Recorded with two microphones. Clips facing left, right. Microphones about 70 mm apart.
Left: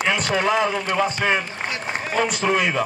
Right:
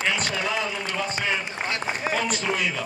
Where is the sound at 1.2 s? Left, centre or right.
Left.